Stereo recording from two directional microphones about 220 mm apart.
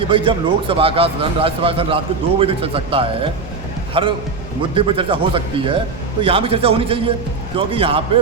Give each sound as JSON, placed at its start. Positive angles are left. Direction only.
{"t": 0.1, "sound": "a man's voice", "side_deg": -25}